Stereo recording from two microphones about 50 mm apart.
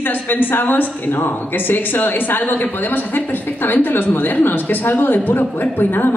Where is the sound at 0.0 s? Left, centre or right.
Left.